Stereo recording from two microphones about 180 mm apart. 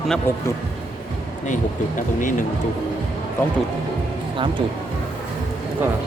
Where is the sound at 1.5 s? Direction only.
45° left (ahead or behind).